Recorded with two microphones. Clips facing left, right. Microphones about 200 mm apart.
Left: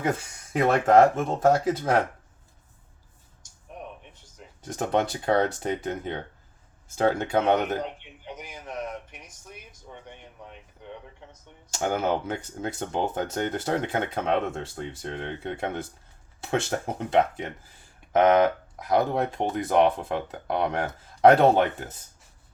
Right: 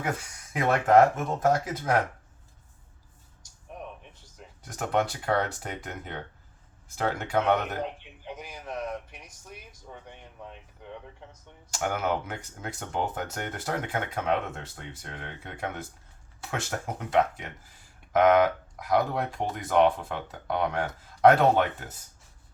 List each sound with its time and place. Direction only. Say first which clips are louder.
0.5 s speech: left 2 dB; 30° left (ahead or behind)
4.6 s speech: left 2 dB; 25° left (ahead or behind)
11.3 s speech: left 1 dB; 25° left (ahead or behind)